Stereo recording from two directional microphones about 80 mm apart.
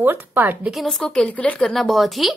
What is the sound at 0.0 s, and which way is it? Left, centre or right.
Speech, right.